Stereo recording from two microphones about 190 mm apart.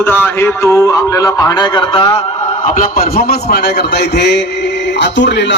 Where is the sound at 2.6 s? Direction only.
50° left (ahead or behind); by 5.5 s 65° left (ahead or behind).